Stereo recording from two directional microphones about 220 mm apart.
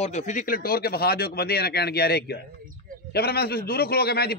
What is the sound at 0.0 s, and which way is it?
A man's voice, 30° left (ahead or behind).